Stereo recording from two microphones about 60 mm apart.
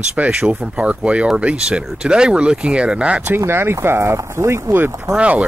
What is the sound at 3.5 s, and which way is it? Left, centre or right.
Speech, right.